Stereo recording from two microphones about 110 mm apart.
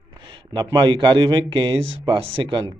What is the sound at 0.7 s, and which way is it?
Speech, 45° right (ahead or behind).